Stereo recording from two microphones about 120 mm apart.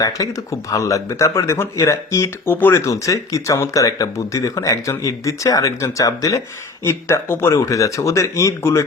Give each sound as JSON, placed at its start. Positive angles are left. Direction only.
{"t": 0.0, "sound": "speech", "side_deg": 30}